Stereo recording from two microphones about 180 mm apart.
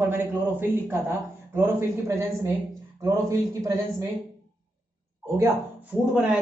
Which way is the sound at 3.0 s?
15° right (ahead or behind).